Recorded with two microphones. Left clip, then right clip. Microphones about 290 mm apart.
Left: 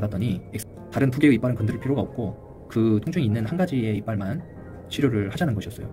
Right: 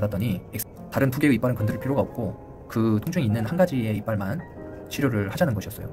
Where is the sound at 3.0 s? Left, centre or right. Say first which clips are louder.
Left 1 dB; right.